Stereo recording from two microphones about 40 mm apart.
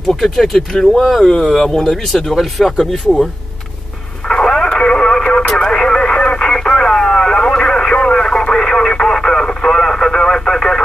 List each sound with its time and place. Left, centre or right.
0.0 s speech: centre
1.2 s speech: centre
4.3 s radio: left